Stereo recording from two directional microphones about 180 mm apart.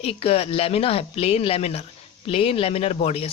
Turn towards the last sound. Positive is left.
turn(degrees=35)  # may be behind; listen again after turning